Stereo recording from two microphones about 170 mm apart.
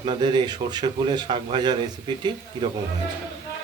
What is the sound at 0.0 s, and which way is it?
Speech, 30° right (ahead or behind).